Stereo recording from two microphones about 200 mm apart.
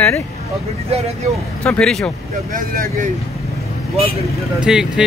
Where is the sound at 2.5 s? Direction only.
40° right (ahead or behind).